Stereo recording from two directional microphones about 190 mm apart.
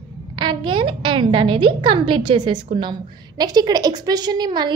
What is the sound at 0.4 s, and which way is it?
A woman's voice, 25° right (ahead or behind).